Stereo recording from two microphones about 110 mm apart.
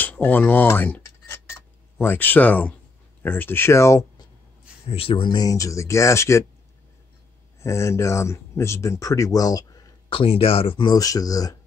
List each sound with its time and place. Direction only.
0.0 s a sound: 15° left (ahead or behind)
3.2 s speech: 20° left (ahead or behind)
4.8 s speech: 60° left (ahead or behind); by 6.4 s 25° left (ahead or behind)
7.6 s speech: 25° left (ahead or behind)
10.0 s speech: 55° left (ahead or behind)
10.9 s speech: 35° left (ahead or behind)